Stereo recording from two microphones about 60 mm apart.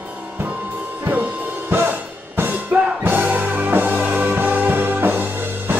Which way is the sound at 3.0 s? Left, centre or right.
Right.